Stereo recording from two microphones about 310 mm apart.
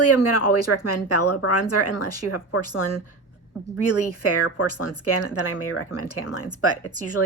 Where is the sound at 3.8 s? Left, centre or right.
Left.